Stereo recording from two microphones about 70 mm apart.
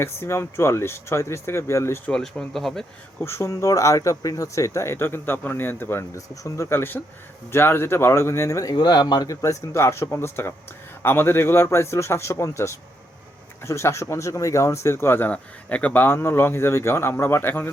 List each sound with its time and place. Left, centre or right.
0.0 s speech: left
2.5 s speech: centre
3.2 s speech: left
6.1 s speech: left
6.7 s speech: left
8.6 s speech: left
9.3 s speech: left
15.3 s speech: left